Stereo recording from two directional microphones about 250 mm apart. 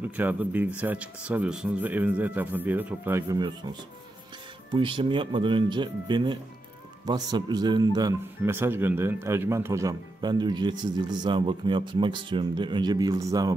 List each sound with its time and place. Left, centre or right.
0.1 s speech: centre
4.7 s speech: centre